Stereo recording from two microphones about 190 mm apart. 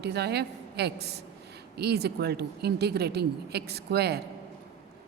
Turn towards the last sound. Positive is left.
turn(degrees=-60)  # may be behind; listen again after turning